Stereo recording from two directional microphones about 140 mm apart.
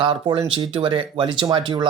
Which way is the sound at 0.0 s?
40° right (ahead or behind).